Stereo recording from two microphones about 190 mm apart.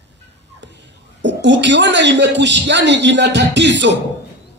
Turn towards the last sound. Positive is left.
turn(degrees=-65)  # may be behind; listen again after turning